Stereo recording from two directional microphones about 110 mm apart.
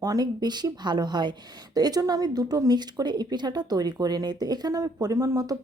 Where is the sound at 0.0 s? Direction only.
35° right (ahead or behind).